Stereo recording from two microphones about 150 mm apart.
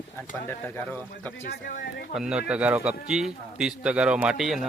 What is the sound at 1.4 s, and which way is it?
Speech, 80° left.